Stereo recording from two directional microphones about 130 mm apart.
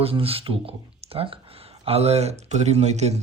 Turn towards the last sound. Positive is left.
turn(degrees=-60)  # may be behind; listen again after turning